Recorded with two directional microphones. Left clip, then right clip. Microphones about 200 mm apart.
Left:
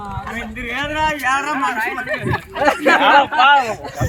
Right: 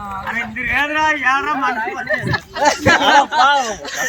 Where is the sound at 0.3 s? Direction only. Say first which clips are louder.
Right 7 dB; 50° left (ahead or behind).